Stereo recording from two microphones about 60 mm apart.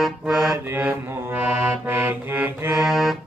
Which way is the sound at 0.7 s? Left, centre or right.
Right.